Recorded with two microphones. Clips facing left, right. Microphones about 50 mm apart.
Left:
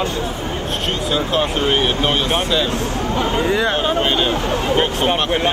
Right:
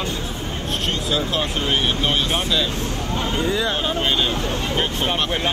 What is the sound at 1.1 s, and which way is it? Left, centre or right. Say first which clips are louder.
Speech: left 5 dB; centre.